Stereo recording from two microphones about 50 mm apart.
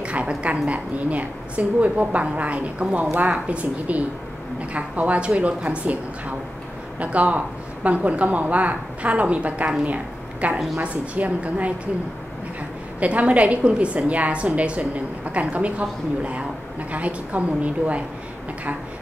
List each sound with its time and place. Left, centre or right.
0.0 s a woman's voice: right
13.0 s a woman's voice: right